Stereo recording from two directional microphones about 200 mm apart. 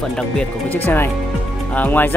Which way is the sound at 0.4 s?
10° left (ahead or behind).